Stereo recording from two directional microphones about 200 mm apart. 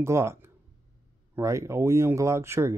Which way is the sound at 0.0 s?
15° right (ahead or behind).